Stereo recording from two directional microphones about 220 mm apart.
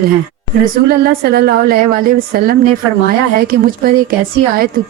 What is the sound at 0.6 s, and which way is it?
A woman's voice, 45° right (ahead or behind).